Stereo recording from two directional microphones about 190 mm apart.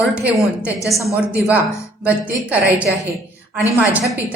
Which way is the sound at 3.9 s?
5° right (ahead or behind).